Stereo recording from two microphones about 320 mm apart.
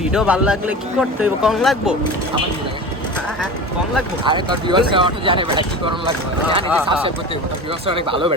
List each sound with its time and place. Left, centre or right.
0.1 s speech: centre
4.3 s speech: centre